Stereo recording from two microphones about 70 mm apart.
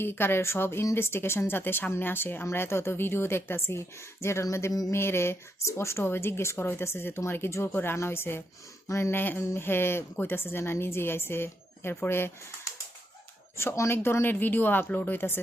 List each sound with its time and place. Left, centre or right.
0.0 s speech: left
9.4 s speech: left
9.6 s speech: left
13.6 s speech: left